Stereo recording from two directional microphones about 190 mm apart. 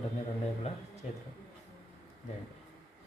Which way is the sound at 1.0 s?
35° left (ahead or behind).